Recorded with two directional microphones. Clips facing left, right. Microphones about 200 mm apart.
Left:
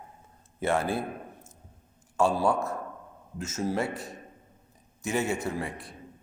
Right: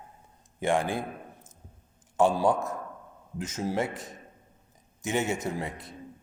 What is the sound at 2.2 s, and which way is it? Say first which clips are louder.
Speech: right 2 dB; 20° right (ahead or behind).